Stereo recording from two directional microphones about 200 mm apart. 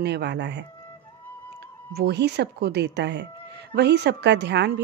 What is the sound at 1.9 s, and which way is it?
A woman's voice, 55° right (ahead or behind).